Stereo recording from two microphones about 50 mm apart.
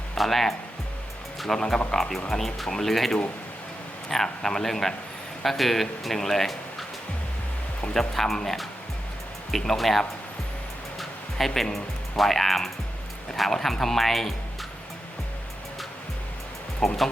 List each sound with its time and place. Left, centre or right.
0.2 s speech: centre
1.5 s speech: centre
7.9 s speech: centre
11.3 s speech: centre
16.8 s speech: centre